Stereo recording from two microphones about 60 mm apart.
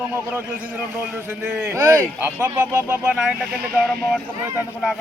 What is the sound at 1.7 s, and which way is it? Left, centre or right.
Speech, right.